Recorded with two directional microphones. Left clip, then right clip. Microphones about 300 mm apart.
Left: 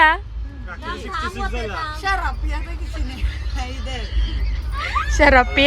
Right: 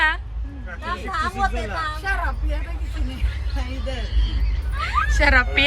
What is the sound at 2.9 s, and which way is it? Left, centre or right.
Speech, centre.